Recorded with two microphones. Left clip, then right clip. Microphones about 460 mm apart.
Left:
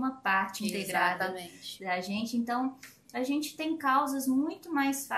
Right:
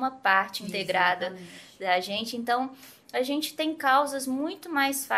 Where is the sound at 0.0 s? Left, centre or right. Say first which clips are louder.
Right 5 dB; right.